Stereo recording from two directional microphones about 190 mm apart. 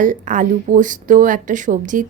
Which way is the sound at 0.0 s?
40° right (ahead or behind).